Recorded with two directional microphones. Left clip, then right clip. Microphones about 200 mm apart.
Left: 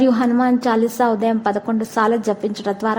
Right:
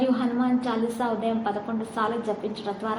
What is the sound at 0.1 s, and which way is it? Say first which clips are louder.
A woman's voice: left 8 dB; 45° left (ahead or behind).